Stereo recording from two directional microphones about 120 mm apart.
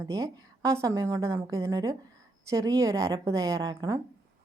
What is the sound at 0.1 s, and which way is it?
A woman's voice, 30° right (ahead or behind).